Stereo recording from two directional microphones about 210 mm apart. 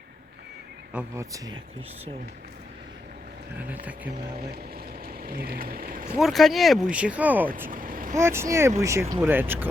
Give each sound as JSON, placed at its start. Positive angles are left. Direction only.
{"t": 0.9, "sound": "speech", "side_deg": -15}
{"t": 3.6, "sound": "speech", "side_deg": -5}
{"t": 5.0, "sound": "speech", "side_deg": -45}
{"t": 6.1, "sound": "speech", "side_deg": 0}
{"t": 7.7, "sound": "vehicle", "side_deg": -40}
{"t": 8.1, "sound": "speech", "side_deg": -10}